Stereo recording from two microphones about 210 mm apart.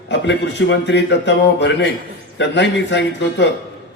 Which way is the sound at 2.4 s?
55° left (ahead or behind).